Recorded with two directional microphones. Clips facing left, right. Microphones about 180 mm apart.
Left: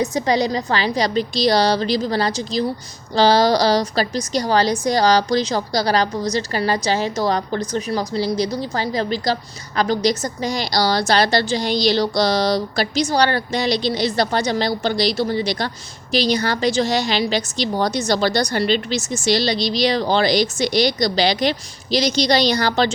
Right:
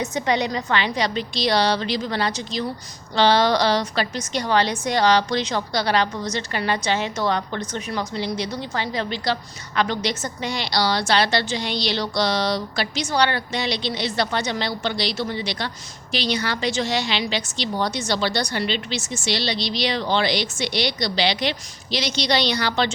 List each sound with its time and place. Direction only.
0.0 s a woman's voice: 35° left (ahead or behind)